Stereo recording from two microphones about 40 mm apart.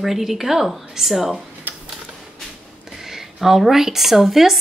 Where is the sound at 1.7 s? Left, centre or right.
Right.